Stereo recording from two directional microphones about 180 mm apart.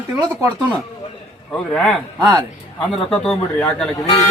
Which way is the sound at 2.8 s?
5° left (ahead or behind).